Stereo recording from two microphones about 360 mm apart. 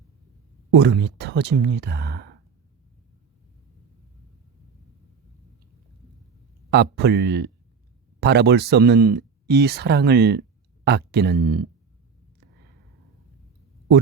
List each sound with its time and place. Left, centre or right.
0.7 s speech: right
6.7 s speech: right